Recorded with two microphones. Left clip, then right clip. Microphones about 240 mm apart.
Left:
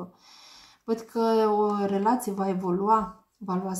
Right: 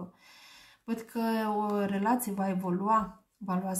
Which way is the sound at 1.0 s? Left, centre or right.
Right.